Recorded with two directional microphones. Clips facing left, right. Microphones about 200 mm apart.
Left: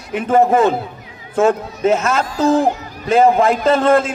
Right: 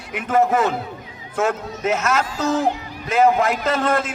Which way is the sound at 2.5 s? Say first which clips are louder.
Left 6 dB; 50° left (ahead or behind).